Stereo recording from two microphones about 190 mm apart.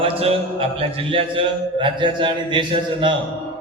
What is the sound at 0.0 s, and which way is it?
A man's voice, 30° right (ahead or behind).